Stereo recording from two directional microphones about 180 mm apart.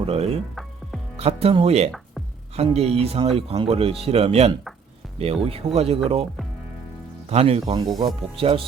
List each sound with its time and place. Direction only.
0.0 s speech: 35° right (ahead or behind)
7.3 s speech: 35° right (ahead or behind)
7.8 s speech: 20° right (ahead or behind)